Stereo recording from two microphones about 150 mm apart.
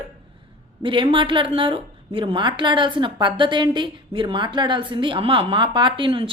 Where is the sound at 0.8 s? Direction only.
35° right (ahead or behind).